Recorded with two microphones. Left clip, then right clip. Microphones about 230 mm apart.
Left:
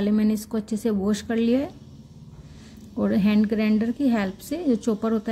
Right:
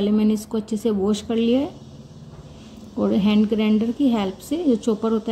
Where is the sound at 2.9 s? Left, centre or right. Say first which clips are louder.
Right 3 dB; left.